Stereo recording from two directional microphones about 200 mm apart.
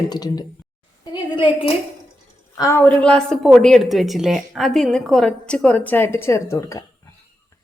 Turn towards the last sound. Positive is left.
turn(degrees=15)  # may be behind; listen again after turning